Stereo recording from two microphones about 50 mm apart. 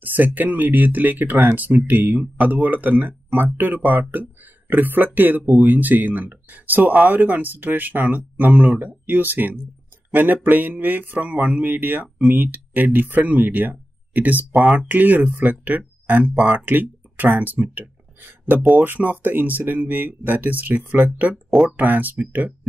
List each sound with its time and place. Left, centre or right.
0.0 s speech: right